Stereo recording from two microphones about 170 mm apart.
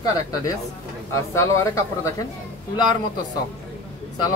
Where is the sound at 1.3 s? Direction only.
15° left (ahead or behind).